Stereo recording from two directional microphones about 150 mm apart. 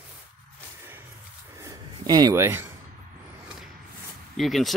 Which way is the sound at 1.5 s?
25° right (ahead or behind).